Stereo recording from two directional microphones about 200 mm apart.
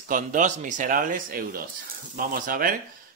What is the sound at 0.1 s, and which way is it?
Speech, 40° right (ahead or behind).